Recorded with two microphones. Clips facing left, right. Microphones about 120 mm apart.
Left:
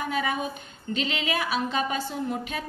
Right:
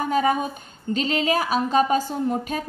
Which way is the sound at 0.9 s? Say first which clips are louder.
Right 6 dB; 40° right (ahead or behind).